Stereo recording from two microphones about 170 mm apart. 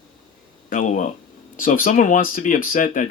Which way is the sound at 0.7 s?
45° left (ahead or behind).